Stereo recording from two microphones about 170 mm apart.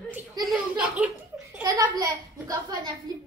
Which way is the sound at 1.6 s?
20° right (ahead or behind).